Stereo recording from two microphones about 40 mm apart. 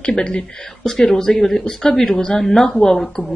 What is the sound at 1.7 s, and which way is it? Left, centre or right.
Speech, left.